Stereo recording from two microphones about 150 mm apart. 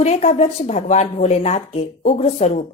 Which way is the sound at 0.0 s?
45° left (ahead or behind).